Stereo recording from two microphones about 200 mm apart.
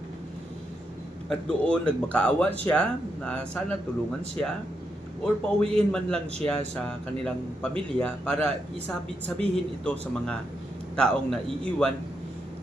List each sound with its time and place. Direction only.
1.3 s a man's voice: 5° left (ahead or behind)
5.2 s a man's voice: 5° left (ahead or behind)